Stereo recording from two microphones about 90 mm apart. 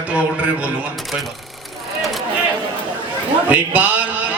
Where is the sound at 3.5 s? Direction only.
15° right (ahead or behind).